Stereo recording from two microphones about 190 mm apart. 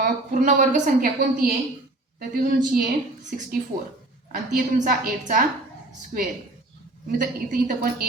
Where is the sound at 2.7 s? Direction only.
50° right (ahead or behind).